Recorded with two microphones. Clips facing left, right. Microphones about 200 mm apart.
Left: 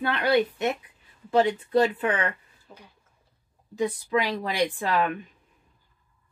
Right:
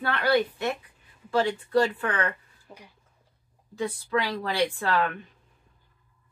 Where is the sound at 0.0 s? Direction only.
20° left (ahead or behind).